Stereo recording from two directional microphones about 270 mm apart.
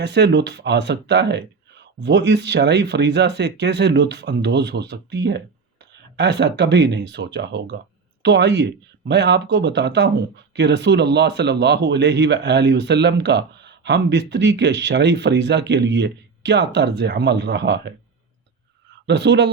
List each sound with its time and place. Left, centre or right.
0.0 s speech: right
19.0 s speech: right